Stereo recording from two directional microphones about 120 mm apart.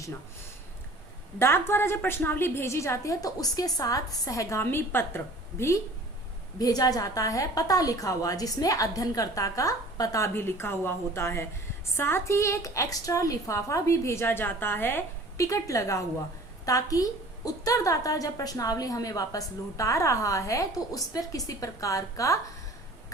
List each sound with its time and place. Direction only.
1.4 s a woman's voice: 20° left (ahead or behind)